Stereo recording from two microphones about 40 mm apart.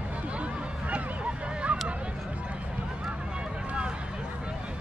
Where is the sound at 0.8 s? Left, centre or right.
Right.